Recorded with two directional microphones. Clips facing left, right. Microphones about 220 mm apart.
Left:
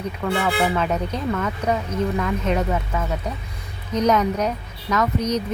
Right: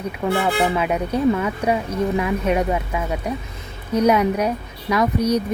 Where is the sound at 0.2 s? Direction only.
15° right (ahead or behind).